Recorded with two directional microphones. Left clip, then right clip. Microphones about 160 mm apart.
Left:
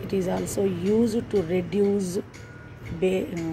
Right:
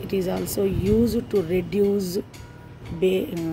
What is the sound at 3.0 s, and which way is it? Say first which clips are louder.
Speech: right 3 dB; 20° right (ahead or behind).